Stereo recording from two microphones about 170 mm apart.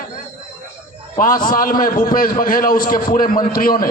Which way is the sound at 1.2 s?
55° left (ahead or behind).